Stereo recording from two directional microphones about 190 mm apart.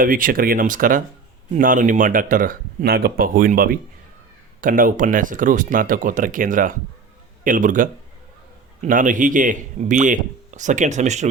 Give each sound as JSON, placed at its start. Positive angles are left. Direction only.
{"t": 0.0, "sound": "speech", "side_deg": -45}